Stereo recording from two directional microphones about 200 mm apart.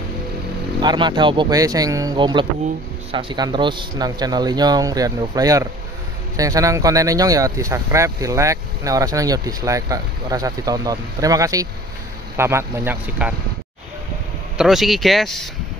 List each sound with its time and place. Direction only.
0.7 s speech: 20° right (ahead or behind)
14.6 s speech: centre (ahead or behind)